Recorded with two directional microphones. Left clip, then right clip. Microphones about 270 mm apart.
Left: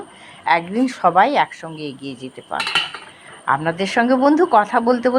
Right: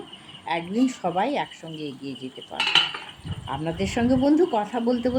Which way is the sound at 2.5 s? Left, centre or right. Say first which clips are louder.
Left 1 dB; centre.